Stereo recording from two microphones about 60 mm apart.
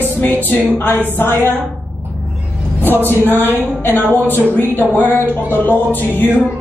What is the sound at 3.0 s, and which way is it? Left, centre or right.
Music, left.